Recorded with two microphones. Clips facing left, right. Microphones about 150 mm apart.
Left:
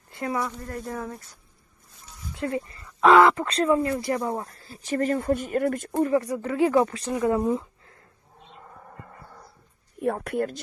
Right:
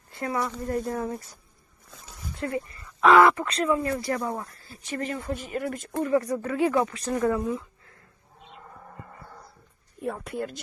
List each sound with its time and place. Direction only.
0.1 s speech: 20° left (ahead or behind)
0.9 s speech: centre (ahead or behind)
2.3 s a sound: 20° left (ahead or behind)
3.1 s speech: 20° left (ahead or behind)
4.9 s speech: 40° left (ahead or behind)
6.0 s speech: 25° left (ahead or behind)
10.0 s speech: 65° left (ahead or behind)